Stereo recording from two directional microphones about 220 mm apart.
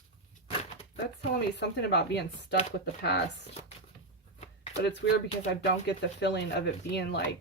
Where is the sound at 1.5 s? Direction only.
50° left (ahead or behind).